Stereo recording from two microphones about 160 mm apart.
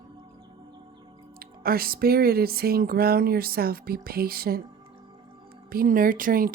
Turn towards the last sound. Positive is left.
turn(degrees=-60)  # may be behind; listen again after turning